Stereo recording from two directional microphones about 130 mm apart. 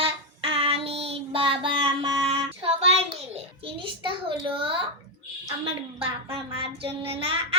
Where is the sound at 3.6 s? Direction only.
40° right (ahead or behind).